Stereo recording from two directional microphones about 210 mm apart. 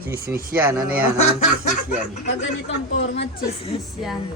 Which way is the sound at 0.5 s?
10° right (ahead or behind).